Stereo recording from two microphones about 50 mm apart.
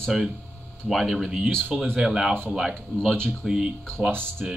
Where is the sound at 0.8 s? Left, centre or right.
Centre.